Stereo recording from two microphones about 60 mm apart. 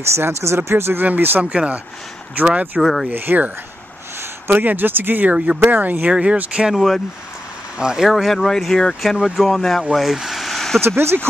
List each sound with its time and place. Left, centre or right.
0.0 s speech: right
1.0 s speech: right
1.4 s speech: centre
2.5 s speech: right
2.8 s speech: centre
3.1 s speech: right
6.7 s speech: centre
7.7 s speech: centre
9.2 s speech: centre
10.1 s vehicle: centre
10.8 s speech: right